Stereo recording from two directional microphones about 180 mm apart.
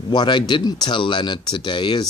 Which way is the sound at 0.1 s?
25° left (ahead or behind).